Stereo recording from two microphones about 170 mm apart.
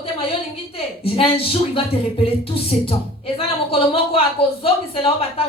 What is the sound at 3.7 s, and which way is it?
A woman's voice, 35° left (ahead or behind).